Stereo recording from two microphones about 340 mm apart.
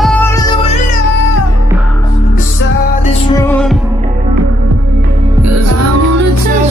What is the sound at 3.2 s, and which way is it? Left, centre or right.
Heart sounds, centre.